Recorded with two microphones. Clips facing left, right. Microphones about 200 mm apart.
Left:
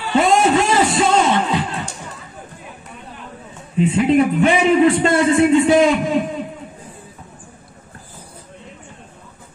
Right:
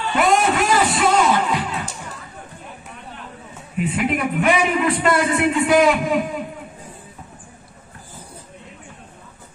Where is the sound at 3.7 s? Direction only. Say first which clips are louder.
Left 7 dB; 25° left (ahead or behind).